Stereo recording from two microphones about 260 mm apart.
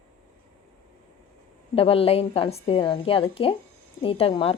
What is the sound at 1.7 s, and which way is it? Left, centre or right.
A woman's voice, left.